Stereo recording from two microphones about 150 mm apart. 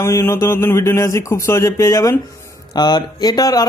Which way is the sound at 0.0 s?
15° left (ahead or behind).